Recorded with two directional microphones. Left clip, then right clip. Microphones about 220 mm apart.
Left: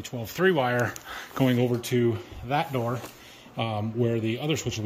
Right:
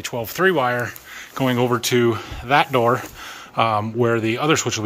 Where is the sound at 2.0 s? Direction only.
35° right (ahead or behind).